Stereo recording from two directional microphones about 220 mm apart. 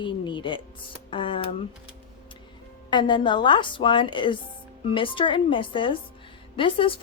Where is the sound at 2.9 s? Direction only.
20° left (ahead or behind).